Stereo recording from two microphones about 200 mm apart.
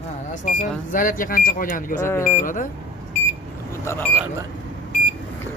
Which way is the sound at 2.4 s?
40° left (ahead or behind).